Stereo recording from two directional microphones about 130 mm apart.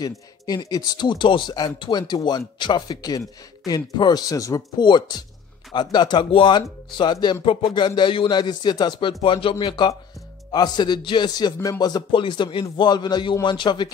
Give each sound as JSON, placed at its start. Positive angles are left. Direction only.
{"t": 0.0, "sound": "speech", "side_deg": 30}